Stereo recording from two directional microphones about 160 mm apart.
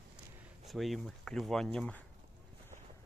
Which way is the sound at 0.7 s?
Centre (ahead or behind).